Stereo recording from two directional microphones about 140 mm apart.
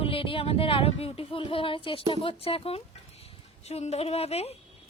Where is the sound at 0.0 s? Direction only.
40° left (ahead or behind).